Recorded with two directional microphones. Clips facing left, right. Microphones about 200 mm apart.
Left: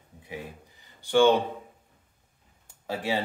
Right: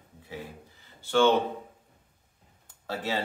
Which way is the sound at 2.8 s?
15° left (ahead or behind).